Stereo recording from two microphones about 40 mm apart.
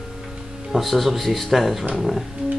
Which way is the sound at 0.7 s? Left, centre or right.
Centre.